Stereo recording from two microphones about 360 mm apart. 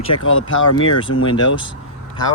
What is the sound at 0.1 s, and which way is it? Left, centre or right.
Speech, left.